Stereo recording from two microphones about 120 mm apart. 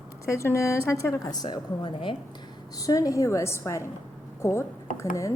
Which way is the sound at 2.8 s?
30° left (ahead or behind).